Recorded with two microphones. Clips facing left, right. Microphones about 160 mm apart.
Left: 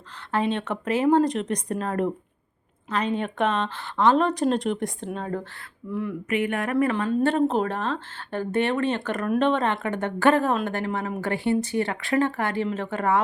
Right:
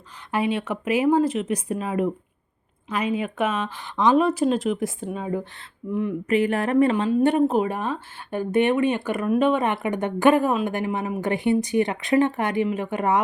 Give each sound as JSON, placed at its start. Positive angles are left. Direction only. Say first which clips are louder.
{"t": 0.3, "sound": "speech", "louder": "right 1 dB", "side_deg": -10}
{"t": 5.9, "sound": "speech", "louder": "right 4 dB", "side_deg": -20}
{"t": 6.2, "sound": "speech", "louder": "right 4 dB", "side_deg": -35}
{"t": 6.9, "sound": "speech", "louder": "right 3 dB", "side_deg": -15}